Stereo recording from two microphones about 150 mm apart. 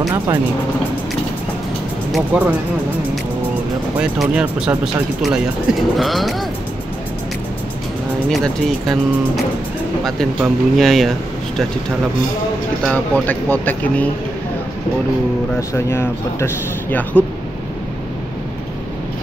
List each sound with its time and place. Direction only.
2.1 s speech: 10° right (ahead or behind)
4.0 s speech: 5° right (ahead or behind)
8.3 s speech: centre (ahead or behind)
12.8 s speech: 10° left (ahead or behind)
15.7 s speech: 15° left (ahead or behind)